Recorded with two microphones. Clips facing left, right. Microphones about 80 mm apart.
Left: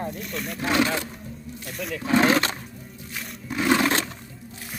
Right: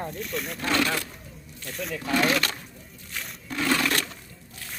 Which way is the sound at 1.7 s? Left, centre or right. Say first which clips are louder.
Left 1 dB; centre.